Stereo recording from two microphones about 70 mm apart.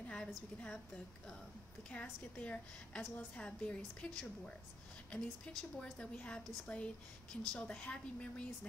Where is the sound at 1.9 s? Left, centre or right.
Centre.